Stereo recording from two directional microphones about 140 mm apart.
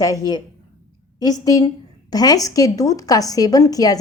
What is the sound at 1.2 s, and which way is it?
A woman's voice, 25° left (ahead or behind).